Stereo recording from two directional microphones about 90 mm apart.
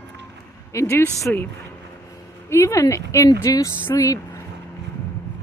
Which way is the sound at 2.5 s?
30° left (ahead or behind).